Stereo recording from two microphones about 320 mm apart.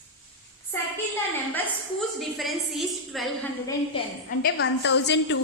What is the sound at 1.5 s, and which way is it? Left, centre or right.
A woman's voice, centre.